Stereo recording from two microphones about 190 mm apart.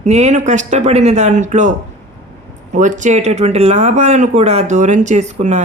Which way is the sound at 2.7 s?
40° right (ahead or behind).